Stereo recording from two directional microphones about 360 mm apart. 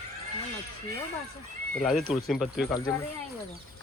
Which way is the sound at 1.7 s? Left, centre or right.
Centre.